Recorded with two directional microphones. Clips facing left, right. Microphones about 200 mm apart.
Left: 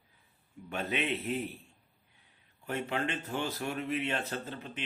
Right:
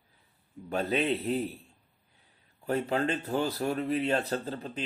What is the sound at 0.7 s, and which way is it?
Speech, 35° right (ahead or behind).